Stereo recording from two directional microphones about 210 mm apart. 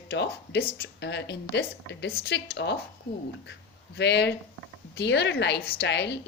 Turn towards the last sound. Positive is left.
turn(degrees=55)  # may be behind; listen again after turning